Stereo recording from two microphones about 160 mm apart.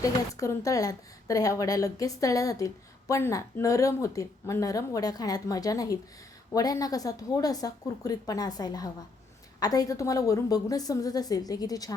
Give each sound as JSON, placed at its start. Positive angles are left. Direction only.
{"t": 0.0, "sound": "a woman's voice", "side_deg": 20}